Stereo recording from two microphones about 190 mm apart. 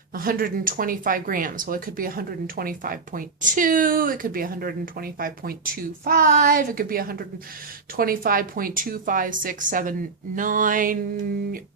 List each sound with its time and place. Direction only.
0.1 s speech: 50° right (ahead or behind)